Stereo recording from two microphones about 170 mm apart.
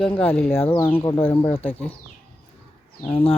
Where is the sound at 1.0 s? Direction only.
30° left (ahead or behind).